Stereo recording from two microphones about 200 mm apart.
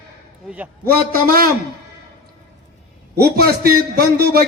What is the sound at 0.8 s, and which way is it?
Speech, 45° right (ahead or behind).